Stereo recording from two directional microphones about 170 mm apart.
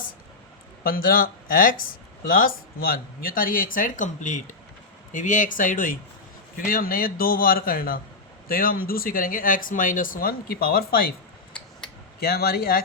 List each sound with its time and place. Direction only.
0.9 s speech: 60° left (ahead or behind)
12.2 s speech: 65° left (ahead or behind)